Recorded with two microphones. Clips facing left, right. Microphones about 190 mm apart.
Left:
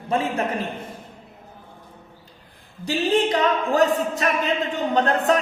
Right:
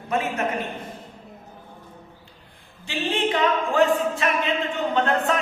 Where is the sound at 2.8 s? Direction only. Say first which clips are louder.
Left 5 dB; 40° left (ahead or behind).